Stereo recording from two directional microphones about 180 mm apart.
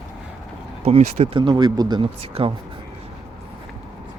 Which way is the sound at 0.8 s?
35° right (ahead or behind).